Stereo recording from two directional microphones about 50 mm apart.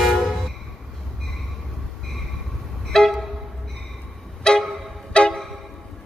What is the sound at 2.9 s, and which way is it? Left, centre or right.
Vehicle, centre.